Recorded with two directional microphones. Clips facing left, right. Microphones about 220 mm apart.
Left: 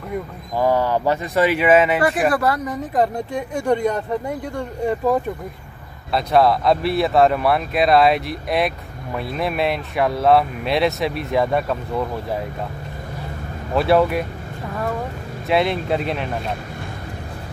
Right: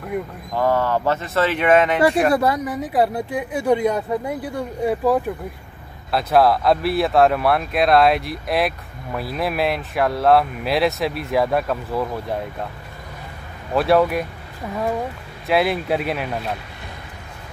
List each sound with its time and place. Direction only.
0.6 s speech: 15° left (ahead or behind)
2.3 s speech: 20° right (ahead or behind)
2.6 s speech: 5° right (ahead or behind)
13.7 s speech: centre (ahead or behind)
15.4 s speech: 5° right (ahead or behind)